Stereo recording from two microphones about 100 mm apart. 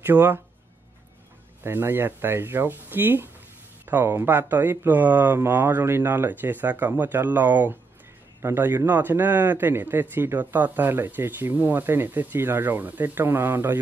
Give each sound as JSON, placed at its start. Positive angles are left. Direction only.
{"t": 0.0, "sound": "speech", "side_deg": -20}
{"t": 1.6, "sound": "speech", "side_deg": -20}